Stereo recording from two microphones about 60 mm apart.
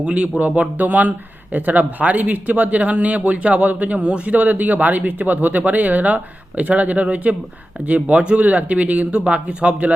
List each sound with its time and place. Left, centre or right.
0.0 s speech: right